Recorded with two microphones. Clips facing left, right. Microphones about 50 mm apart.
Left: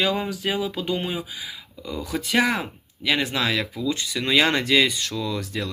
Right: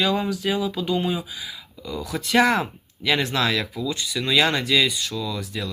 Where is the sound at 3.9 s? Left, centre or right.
Left.